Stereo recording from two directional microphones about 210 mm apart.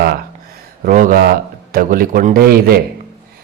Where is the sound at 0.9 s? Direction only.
40° right (ahead or behind).